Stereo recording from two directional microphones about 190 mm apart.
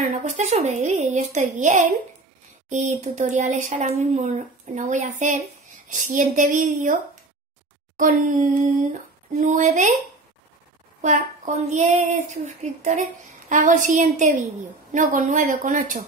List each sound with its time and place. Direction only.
0.2 s speech: 40° right (ahead or behind)
8.0 s speech: 45° right (ahead or behind)
11.0 s speech: 40° right (ahead or behind)